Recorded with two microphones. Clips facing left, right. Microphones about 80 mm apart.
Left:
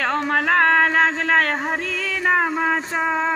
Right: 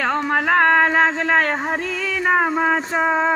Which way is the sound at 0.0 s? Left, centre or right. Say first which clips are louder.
Right 1 dB; centre.